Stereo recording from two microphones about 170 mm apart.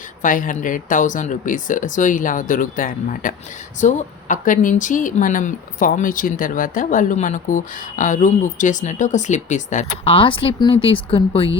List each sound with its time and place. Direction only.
0.2 s speech: 50° left (ahead or behind)
10.1 s speech: 30° left (ahead or behind)